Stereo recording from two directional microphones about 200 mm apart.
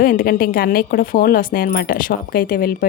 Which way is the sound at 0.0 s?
45° left (ahead or behind).